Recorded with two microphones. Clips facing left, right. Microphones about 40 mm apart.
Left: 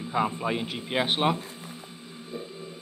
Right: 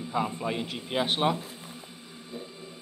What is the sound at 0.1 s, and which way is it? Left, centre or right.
A man's voice, left.